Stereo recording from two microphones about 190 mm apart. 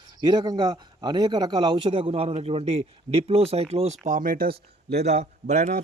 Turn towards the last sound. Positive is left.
turn(degrees=-35)  # may be behind; listen again after turning